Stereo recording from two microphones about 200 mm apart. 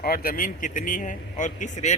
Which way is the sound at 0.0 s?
50° left (ahead or behind).